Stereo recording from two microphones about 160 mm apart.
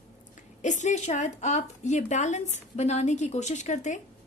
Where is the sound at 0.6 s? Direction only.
50° left (ahead or behind).